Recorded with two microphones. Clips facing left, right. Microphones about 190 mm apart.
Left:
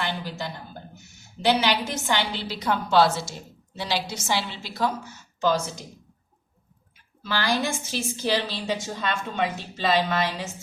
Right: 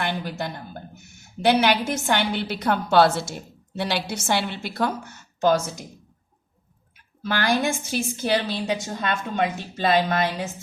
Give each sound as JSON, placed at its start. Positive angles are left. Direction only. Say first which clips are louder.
{"t": 0.0, "sound": "a woman's voice", "louder": "right 3 dB", "side_deg": -55}
{"t": 7.2, "sound": "a woman's voice", "louder": "right 3 dB", "side_deg": -50}